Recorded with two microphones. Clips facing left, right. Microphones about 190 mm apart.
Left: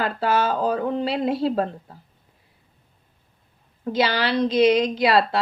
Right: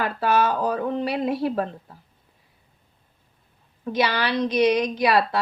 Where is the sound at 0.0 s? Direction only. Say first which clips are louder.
Even; 30° left (ahead or behind).